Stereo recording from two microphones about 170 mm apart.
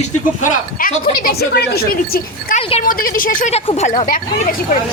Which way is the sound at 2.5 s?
35° left (ahead or behind).